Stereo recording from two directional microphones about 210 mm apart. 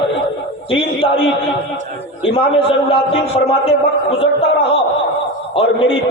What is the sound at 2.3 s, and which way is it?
A man's voice, 25° left (ahead or behind).